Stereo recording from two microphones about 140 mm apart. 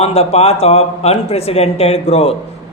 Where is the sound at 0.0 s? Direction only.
45° left (ahead or behind).